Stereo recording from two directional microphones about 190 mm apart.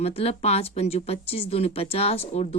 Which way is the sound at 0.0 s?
35° left (ahead or behind).